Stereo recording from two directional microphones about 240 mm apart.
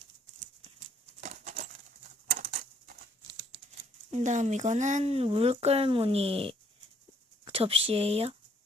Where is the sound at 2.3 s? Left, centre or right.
Right.